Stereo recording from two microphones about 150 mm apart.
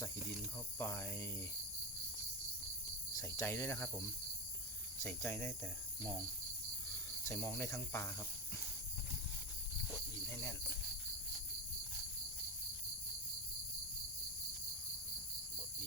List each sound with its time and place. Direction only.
0.8 s speech: 15° left (ahead or behind)
3.2 s speech: 20° left (ahead or behind)
5.0 s speech: 15° left (ahead or behind)
7.3 s speech: 15° left (ahead or behind)